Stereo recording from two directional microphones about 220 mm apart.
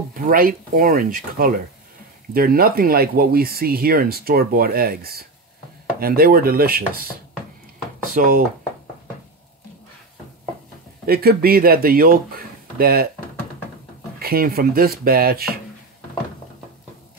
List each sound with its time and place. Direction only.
0.1 s speech: 40° right (ahead or behind)
11.1 s speech: 45° right (ahead or behind)
14.2 s speech: 45° right (ahead or behind)